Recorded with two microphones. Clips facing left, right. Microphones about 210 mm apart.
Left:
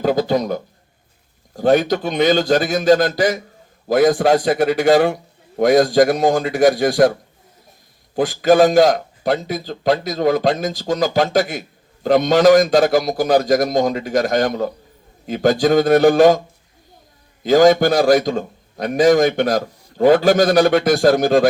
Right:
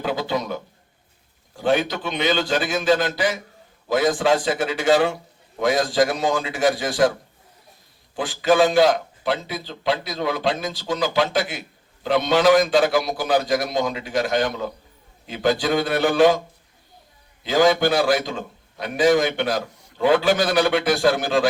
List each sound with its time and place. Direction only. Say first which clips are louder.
0.0 s a man's voice: left 7 dB; 40° left (ahead or behind)
8.1 s a man's voice: left 5 dB; 40° left (ahead or behind)
17.4 s a man's voice: left 6 dB; 45° left (ahead or behind)